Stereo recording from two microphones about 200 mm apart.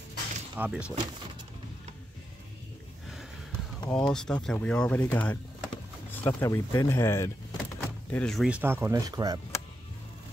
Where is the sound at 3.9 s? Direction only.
5° left (ahead or behind).